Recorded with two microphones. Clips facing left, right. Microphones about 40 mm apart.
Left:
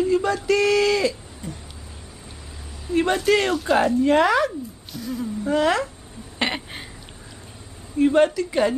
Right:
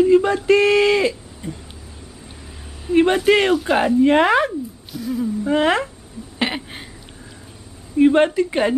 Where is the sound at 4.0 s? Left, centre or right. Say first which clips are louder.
Right 3 dB; right.